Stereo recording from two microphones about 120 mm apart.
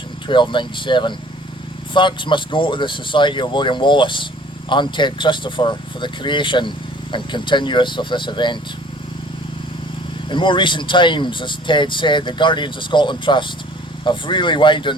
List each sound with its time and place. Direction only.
0.3 s speech: 40° left (ahead or behind)
10.2 s speech: 40° left (ahead or behind)